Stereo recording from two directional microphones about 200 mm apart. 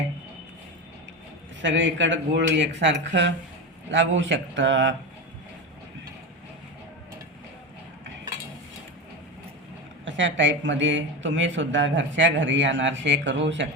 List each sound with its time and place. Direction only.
1.6 s speech: 65° right (ahead or behind)
10.1 s speech: 65° right (ahead or behind)